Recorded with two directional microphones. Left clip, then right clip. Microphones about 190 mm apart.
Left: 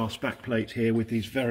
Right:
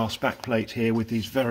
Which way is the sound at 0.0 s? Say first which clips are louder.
Right 5 dB; 45° right (ahead or behind).